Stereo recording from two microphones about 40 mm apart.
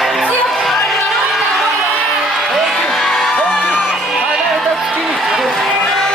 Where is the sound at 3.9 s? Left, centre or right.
Centre.